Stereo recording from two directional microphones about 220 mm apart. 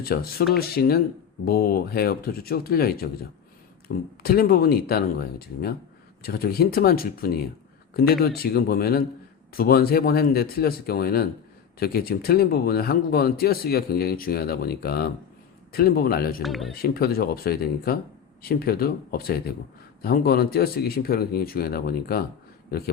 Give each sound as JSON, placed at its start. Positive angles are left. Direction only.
{"t": 0.0, "sound": "speech", "side_deg": 45}
{"t": 16.4, "sound": "speech", "side_deg": 0}
{"t": 16.8, "sound": "speech", "side_deg": 45}